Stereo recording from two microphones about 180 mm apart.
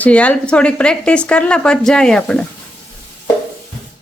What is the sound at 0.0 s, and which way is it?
Speech, 5° left (ahead or behind).